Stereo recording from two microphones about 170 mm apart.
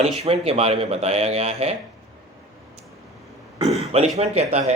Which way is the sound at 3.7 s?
40° right (ahead or behind).